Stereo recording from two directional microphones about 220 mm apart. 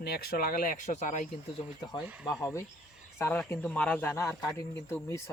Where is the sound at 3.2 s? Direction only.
10° left (ahead or behind).